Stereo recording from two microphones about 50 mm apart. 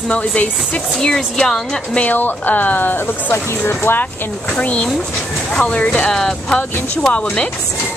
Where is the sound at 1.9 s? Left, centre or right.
Left.